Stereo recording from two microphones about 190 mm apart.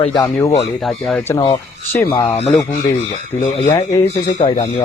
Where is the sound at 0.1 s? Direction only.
20° left (ahead or behind).